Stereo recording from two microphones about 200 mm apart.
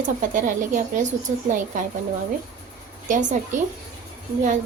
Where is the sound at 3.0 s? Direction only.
40° right (ahead or behind).